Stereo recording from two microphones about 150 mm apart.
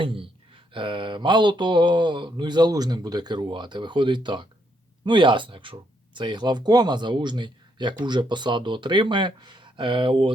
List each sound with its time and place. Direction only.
0.0 s speech: 35° right (ahead or behind)